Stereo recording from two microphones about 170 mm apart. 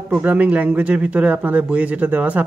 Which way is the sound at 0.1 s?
10° right (ahead or behind).